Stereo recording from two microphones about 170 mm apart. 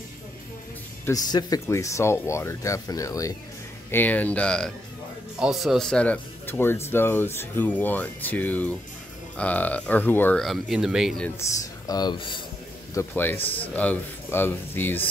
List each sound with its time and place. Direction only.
1.0 s speech: 20° left (ahead or behind); by 11.2 s centre (ahead or behind)
11.2 s speech: 15° left (ahead or behind)
12.9 s speech: 10° left (ahead or behind)